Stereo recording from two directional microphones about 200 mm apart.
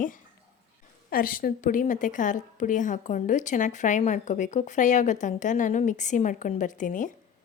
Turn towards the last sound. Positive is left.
turn(degrees=40)  # may be behind; listen again after turning